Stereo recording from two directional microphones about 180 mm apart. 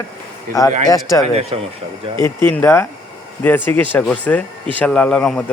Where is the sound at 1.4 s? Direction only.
35° right (ahead or behind).